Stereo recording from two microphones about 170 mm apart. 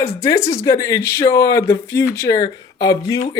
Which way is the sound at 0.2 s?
15° left (ahead or behind).